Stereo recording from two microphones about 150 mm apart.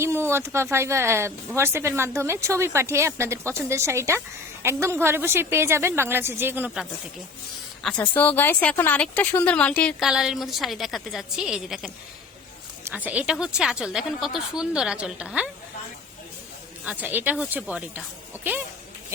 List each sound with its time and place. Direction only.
0.0 s speech: 15° right (ahead or behind)
7.8 s a woman's voice: centre (ahead or behind)
10.1 s a woman's voice: 5° right (ahead or behind)
12.9 s a woman's voice: 10° right (ahead or behind)
16.8 s speech: 10° right (ahead or behind)